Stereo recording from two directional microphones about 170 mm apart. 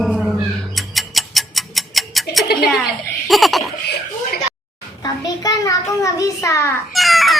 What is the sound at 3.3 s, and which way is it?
Laughter, centre (ahead or behind).